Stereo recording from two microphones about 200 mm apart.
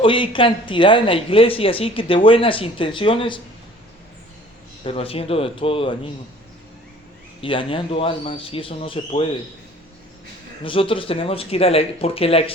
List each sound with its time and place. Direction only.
0.0 s speech: 25° left (ahead or behind)
4.8 s speech: 30° left (ahead or behind)
7.4 s speech: 25° left (ahead or behind)
10.6 s speech: 25° left (ahead or behind)